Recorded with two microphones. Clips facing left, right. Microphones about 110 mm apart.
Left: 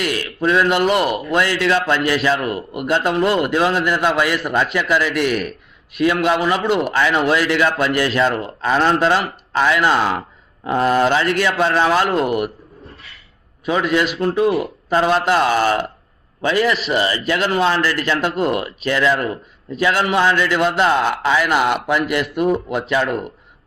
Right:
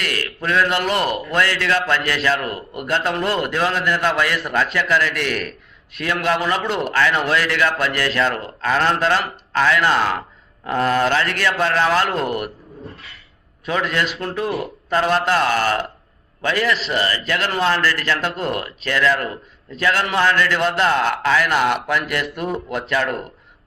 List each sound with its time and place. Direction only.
0.0 s a man's voice: 15° left (ahead or behind)
0.9 s a man's voice: 5° left (ahead or behind)
12.0 s a man's voice: 5° left (ahead or behind)
13.7 s a man's voice: 10° left (ahead or behind)
14.5 s speech: centre (ahead or behind)
14.9 s a man's voice: 10° left (ahead or behind)